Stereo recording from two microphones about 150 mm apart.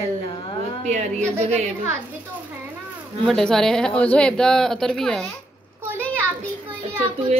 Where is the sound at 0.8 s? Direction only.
50° right (ahead or behind).